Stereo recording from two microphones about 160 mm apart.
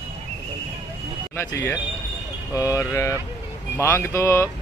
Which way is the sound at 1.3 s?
15° left (ahead or behind).